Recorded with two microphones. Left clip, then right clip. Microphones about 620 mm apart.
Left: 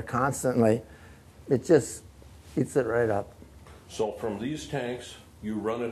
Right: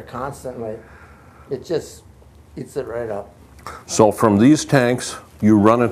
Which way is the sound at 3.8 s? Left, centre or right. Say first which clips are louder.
Right 16 dB; right.